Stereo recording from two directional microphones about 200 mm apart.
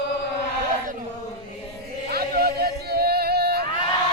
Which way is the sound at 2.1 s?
50° right (ahead or behind).